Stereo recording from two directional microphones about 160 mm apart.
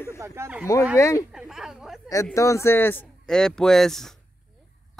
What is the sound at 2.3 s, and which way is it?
Speech, 20° left (ahead or behind).